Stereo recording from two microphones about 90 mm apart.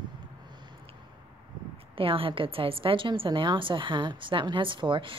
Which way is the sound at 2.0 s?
90° right.